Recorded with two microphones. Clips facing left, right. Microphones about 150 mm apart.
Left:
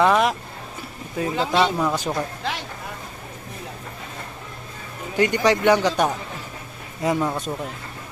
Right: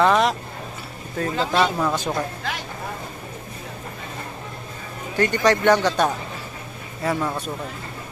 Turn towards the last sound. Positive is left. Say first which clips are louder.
# left 2 dB
turn(degrees=20)  # may be behind; listen again after turning